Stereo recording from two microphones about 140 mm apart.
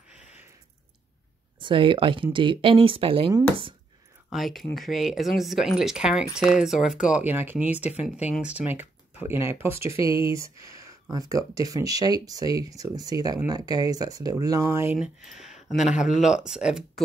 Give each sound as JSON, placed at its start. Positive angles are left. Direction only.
{"t": 1.6, "sound": "speech", "side_deg": -35}
{"t": 4.3, "sound": "speech", "side_deg": 0}
{"t": 15.0, "sound": "speech", "side_deg": 0}